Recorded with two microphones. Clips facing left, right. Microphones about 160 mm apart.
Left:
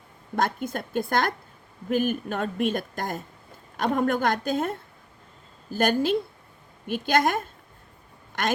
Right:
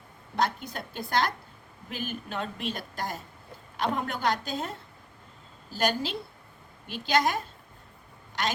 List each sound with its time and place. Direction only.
0.3 s a woman's voice: 50° left (ahead or behind)